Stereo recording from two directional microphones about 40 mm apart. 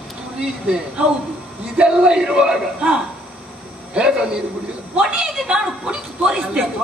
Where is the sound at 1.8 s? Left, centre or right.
Centre.